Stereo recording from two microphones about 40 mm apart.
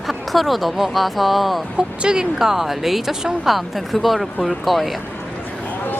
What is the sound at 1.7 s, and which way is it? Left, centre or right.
Speech, right.